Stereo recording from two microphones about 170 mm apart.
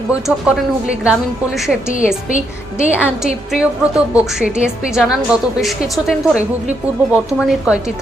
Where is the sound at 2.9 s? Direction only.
10° right (ahead or behind).